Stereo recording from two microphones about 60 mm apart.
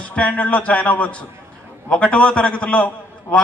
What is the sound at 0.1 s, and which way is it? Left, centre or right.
A man's voice, left.